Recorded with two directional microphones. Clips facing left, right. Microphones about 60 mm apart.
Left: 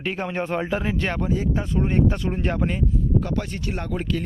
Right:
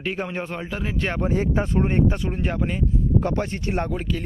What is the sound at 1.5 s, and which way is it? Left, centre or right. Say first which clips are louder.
Speech: right 3 dB; right.